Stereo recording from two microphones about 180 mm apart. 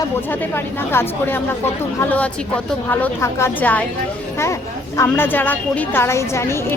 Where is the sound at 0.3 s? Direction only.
10° left (ahead or behind).